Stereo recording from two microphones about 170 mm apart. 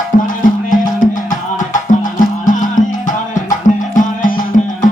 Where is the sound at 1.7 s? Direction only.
50° left (ahead or behind).